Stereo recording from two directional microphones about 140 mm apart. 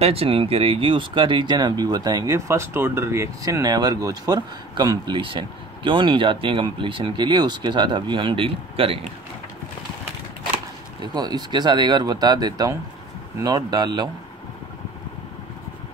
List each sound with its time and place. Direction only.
0.0 s speech: 45° right (ahead or behind)
11.0 s speech: 30° right (ahead or behind)